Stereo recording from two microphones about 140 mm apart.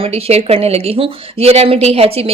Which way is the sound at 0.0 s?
45° right (ahead or behind).